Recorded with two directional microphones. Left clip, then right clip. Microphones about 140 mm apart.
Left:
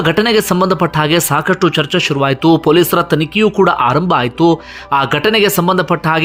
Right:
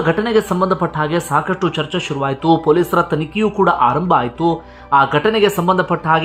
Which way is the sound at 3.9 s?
15° left (ahead or behind).